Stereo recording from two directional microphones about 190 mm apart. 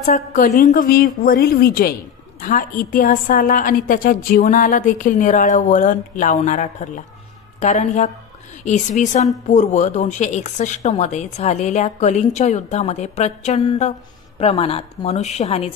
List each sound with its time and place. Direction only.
0.0 s a woman's voice: 40° left (ahead or behind)